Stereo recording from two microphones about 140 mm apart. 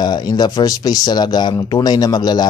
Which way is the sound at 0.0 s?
30° left (ahead or behind).